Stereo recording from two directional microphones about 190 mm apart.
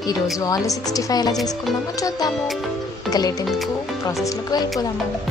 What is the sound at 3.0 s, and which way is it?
Speech, 20° left (ahead or behind).